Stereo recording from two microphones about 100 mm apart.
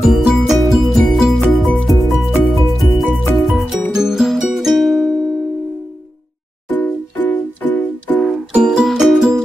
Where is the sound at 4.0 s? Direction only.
5° right (ahead or behind).